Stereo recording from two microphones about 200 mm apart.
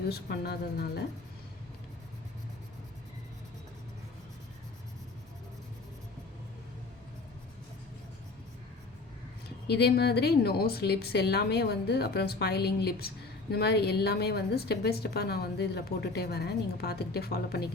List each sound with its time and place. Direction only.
0.1 s a woman's voice: 55° left (ahead or behind)
9.6 s a woman's voice: 55° left (ahead or behind)